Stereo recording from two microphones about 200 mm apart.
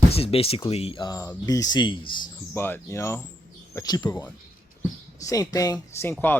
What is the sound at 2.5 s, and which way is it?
Speech, 10° left (ahead or behind).